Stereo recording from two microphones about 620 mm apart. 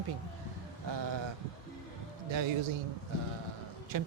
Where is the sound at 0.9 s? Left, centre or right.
Right.